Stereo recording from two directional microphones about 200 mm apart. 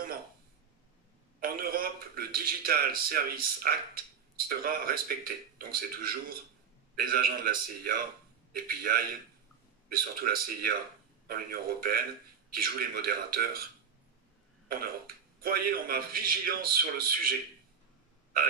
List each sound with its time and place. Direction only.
1.4 s a man's voice: 45° right (ahead or behind)
15.4 s a man's voice: 45° right (ahead or behind)